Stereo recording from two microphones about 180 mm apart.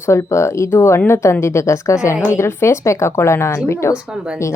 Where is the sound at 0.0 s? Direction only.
15° left (ahead or behind).